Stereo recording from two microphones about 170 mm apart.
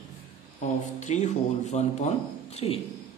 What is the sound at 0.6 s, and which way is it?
A man's voice, 45° left (ahead or behind).